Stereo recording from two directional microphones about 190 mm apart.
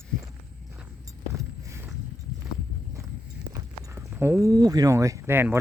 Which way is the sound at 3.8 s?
15° right (ahead or behind).